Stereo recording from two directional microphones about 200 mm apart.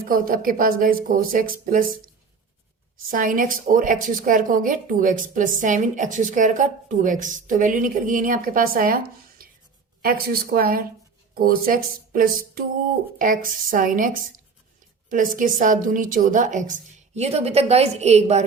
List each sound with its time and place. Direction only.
0.0 s speech: 45° right (ahead or behind)
3.1 s a woman's voice: 45° right (ahead or behind)